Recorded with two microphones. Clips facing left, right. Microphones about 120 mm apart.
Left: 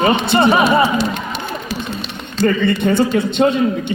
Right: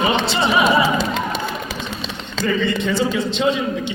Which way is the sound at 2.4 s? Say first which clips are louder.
Left 5 dB; 55° left (ahead or behind).